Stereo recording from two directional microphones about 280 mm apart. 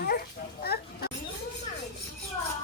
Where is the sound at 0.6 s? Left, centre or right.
Left.